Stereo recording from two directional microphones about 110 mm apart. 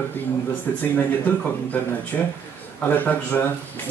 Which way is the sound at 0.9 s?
15° left (ahead or behind).